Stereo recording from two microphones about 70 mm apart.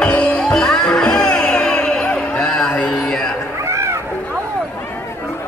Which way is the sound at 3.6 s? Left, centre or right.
Right.